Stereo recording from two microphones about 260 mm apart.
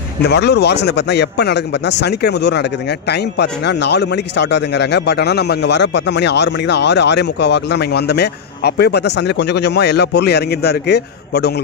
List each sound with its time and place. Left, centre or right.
0.2 s a man's voice: left